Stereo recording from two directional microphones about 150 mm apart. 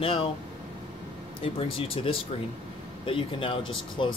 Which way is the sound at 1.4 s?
40° left (ahead or behind).